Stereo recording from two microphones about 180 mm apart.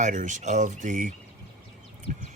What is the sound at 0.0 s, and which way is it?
Speech, 45° right (ahead or behind).